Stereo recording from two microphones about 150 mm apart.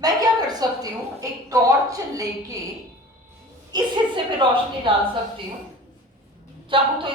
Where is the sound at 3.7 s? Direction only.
30° right (ahead or behind).